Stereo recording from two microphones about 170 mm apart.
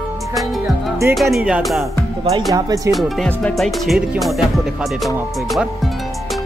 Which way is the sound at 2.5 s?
20° right (ahead or behind).